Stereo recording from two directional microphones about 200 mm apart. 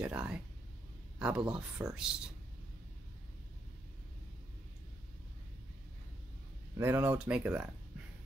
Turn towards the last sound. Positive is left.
turn(degrees=-5)  # may be behind; listen again after turning